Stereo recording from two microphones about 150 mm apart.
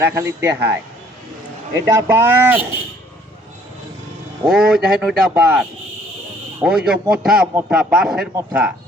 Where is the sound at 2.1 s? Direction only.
15° right (ahead or behind).